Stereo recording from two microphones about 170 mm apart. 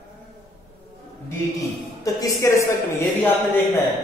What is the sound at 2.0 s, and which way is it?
A man's voice, 20° left (ahead or behind).